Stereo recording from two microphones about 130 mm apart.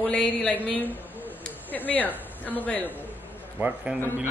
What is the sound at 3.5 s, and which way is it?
Speech, 10° right (ahead or behind).